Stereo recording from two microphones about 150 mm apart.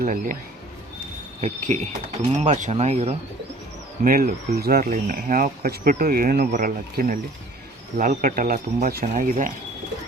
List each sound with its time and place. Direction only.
0.0 s speech: 65° right (ahead or behind)
1.4 s speech: 50° right (ahead or behind)
4.0 s speech: 70° right (ahead or behind); by 6.5 s 85° right
6.5 s speech: 65° right (ahead or behind)